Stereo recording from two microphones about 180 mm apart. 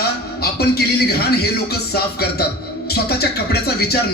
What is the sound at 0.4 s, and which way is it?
Speech, 60° left (ahead or behind).